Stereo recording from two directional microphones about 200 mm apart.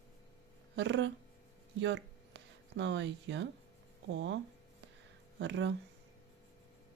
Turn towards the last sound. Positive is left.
turn(degrees=-65)  # may be behind; listen again after turning